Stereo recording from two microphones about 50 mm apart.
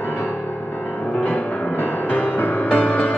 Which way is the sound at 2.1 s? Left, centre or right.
Left.